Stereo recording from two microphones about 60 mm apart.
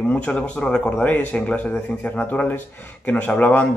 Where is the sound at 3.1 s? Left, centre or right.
Left.